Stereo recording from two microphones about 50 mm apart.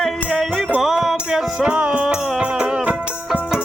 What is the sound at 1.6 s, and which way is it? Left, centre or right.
Music, right.